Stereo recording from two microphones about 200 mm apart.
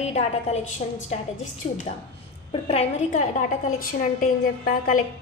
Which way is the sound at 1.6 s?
30° left (ahead or behind).